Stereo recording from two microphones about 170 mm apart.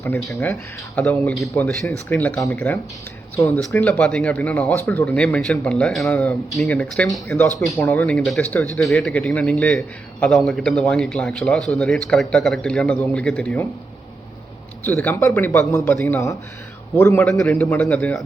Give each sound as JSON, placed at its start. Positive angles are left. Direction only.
{"t": 0.9, "sound": "a man's voice", "side_deg": 10}
{"t": 14.8, "sound": "speech", "side_deg": 10}
{"t": 17.2, "sound": "a man's voice", "side_deg": 0}